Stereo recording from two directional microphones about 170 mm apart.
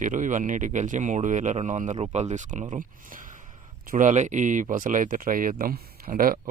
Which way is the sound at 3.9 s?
50° right (ahead or behind).